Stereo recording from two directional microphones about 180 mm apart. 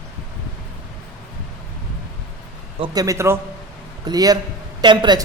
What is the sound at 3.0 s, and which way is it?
A man's voice, 15° right (ahead or behind).